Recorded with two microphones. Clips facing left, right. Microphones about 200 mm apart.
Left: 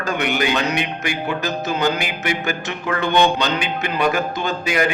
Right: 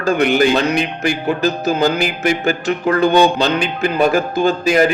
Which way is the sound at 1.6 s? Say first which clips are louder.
Right 5 dB; 40° right (ahead or behind).